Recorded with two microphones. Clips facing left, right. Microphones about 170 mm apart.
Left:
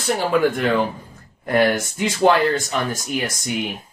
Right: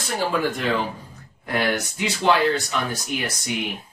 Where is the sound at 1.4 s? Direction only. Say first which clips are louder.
Left 6 dB; 45° left (ahead or behind).